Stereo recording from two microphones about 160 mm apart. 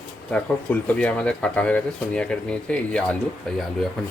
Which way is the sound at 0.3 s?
10° left (ahead or behind).